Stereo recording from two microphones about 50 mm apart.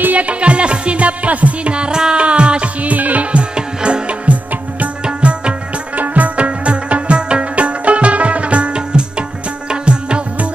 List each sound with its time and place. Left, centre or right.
0.0 s music: right
5.9 s music: right